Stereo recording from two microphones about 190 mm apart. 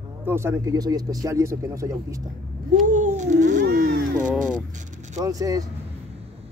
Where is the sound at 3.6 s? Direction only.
60° right (ahead or behind).